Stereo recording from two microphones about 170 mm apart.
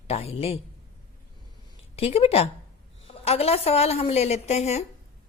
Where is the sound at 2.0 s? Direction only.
35° left (ahead or behind).